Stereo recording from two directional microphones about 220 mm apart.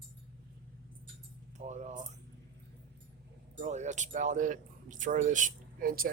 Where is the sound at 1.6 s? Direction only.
30° right (ahead or behind).